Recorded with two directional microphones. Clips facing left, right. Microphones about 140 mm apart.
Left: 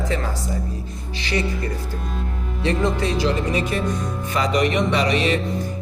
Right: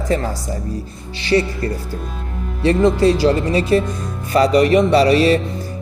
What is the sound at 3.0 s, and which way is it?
Speech, 35° right (ahead or behind).